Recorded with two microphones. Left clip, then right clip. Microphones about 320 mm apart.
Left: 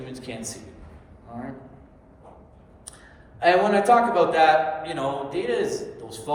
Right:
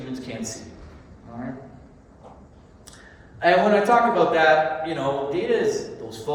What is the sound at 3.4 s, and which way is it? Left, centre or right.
A man's voice, left.